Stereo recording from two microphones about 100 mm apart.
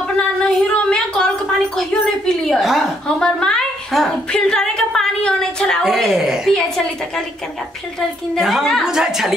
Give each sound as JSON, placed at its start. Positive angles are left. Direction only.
{"t": 0.4, "sound": "a sound", "side_deg": 10}
{"t": 1.8, "sound": "a woman's voice", "side_deg": 5}
{"t": 8.4, "sound": "a woman's voice", "side_deg": 0}